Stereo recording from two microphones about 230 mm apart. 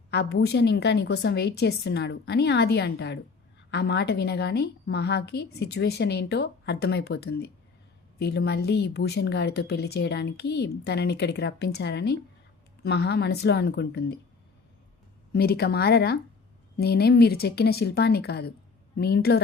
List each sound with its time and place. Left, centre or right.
0.1 s speech: left
15.3 s speech: left